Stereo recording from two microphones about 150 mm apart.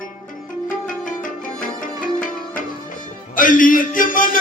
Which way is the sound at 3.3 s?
65° left (ahead or behind).